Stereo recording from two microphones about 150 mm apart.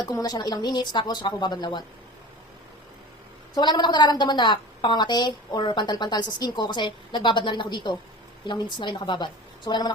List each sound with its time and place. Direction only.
0.0 s a woman's voice: 25° left (ahead or behind)
3.5 s a woman's voice: 30° left (ahead or behind)